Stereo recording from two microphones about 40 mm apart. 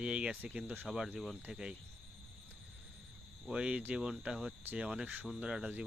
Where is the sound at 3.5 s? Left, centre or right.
Right.